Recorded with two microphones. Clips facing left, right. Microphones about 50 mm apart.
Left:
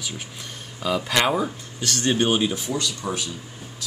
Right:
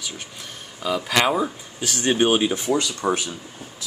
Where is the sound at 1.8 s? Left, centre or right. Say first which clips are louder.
Right 2 dB; centre.